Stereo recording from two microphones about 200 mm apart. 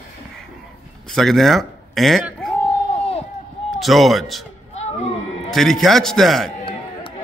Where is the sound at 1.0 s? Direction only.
Centre (ahead or behind).